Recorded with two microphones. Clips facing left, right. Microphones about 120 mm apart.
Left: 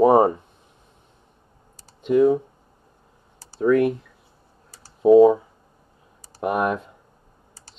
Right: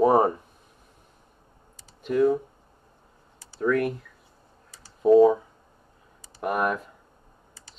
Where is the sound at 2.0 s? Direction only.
20° left (ahead or behind).